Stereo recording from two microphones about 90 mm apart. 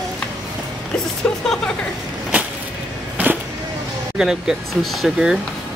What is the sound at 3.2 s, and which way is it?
Vehicle, 20° right (ahead or behind).